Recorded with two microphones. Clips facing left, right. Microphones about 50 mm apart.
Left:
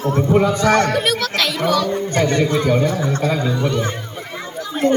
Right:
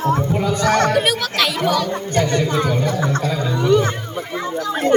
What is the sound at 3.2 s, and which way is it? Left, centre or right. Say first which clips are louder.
Speech: left 2 dB; centre.